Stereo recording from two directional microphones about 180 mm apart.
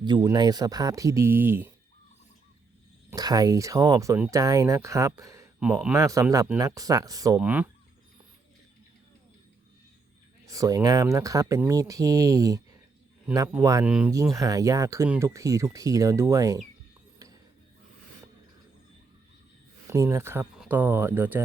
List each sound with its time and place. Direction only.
0.0 s speech: 25° right (ahead or behind)
3.1 s speech: 20° right (ahead or behind)
5.5 s a man's voice: 5° right (ahead or behind)
6.0 s speech: 20° right (ahead or behind)
7.4 s speech: 10° right (ahead or behind)
10.4 s speech: 20° right (ahead or behind)
19.9 s speech: 15° right (ahead or behind)